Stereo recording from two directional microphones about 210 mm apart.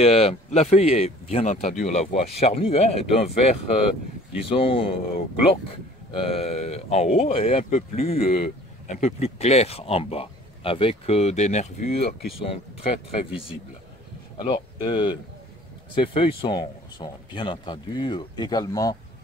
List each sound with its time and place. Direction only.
0.0 s speech: 30° left (ahead or behind)